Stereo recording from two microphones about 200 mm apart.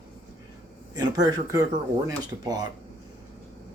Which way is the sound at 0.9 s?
20° right (ahead or behind).